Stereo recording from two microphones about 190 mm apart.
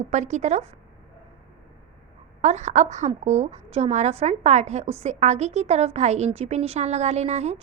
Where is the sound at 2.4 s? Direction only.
35° right (ahead or behind).